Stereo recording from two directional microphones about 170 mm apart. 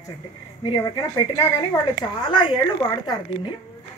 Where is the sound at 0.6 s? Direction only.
30° left (ahead or behind).